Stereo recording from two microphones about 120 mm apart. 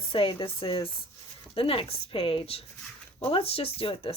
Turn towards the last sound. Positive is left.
turn(degrees=50)  # may be behind; listen again after turning